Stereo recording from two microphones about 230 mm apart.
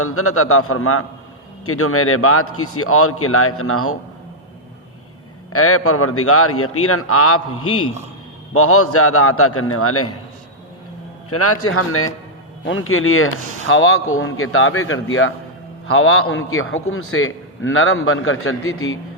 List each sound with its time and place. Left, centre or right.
0.0 s a man's voice: left
5.5 s a man's voice: left
11.3 s a man's voice: left